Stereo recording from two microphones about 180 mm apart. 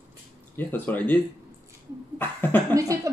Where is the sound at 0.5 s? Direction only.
10° left (ahead or behind).